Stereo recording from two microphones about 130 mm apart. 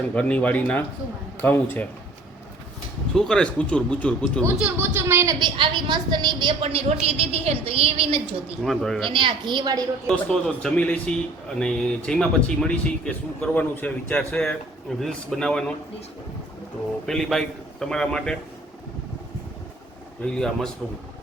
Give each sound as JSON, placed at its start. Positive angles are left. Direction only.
{"t": 0.1, "sound": "speech", "side_deg": 10}
{"t": 3.2, "sound": "speech", "side_deg": 5}
{"t": 4.4, "sound": "speech", "side_deg": -15}
{"t": 5.5, "sound": "a woman's voice", "side_deg": -35}
{"t": 8.6, "sound": "a man's voice", "side_deg": 0}
{"t": 9.0, "sound": "a woman's voice", "side_deg": -40}
{"t": 10.1, "sound": "a man's voice", "side_deg": 5}
{"t": 17.1, "sound": "a man's voice", "side_deg": 5}
{"t": 20.2, "sound": "a man's voice", "side_deg": 5}